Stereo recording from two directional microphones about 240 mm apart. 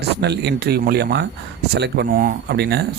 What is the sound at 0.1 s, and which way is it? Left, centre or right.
Speech, right.